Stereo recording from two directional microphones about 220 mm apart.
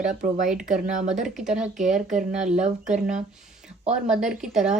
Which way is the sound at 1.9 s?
35° right (ahead or behind).